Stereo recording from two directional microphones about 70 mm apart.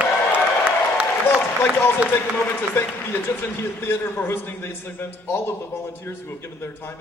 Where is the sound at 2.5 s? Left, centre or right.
Left.